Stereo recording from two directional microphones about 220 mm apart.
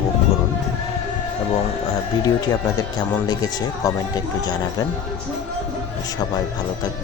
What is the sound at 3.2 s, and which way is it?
Speech, 15° left (ahead or behind).